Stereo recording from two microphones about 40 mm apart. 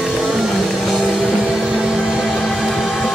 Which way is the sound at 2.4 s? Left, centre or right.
Centre.